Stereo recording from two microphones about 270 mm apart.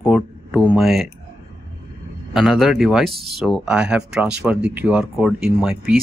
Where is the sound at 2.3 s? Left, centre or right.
Centre.